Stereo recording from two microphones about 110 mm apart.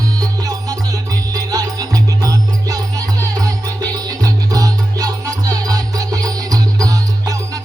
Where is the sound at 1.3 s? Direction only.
35° right (ahead or behind).